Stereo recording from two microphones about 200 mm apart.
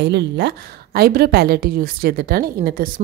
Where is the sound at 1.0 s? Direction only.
50° right (ahead or behind).